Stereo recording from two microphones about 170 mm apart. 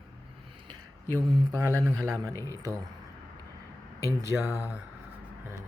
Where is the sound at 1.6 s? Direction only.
15° right (ahead or behind).